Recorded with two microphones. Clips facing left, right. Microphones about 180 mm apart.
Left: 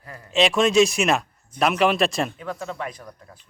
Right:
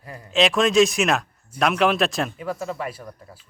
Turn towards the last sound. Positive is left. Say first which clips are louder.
# right 3 dB
turn(degrees=-5)  # may be behind; listen again after turning